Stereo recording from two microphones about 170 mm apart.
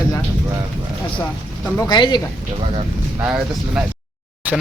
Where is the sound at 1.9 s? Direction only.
25° left (ahead or behind).